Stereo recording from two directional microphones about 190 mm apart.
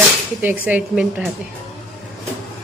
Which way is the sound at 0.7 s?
5° right (ahead or behind).